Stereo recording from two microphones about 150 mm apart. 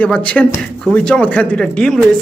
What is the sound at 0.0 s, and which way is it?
Speech, 10° left (ahead or behind).